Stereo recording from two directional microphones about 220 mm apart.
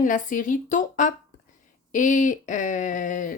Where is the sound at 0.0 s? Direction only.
35° left (ahead or behind).